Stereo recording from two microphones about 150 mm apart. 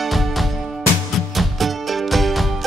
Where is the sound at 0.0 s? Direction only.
Centre (ahead or behind).